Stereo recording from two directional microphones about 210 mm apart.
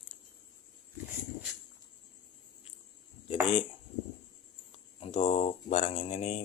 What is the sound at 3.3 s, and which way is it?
Dishes, 30° left (ahead or behind).